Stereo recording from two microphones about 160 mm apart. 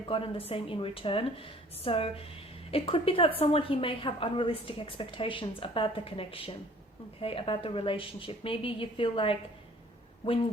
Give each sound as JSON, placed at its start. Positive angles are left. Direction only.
{"t": 0.0, "sound": "a woman's voice", "side_deg": 35}